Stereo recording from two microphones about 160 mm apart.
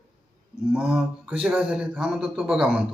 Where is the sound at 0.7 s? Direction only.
5° right (ahead or behind).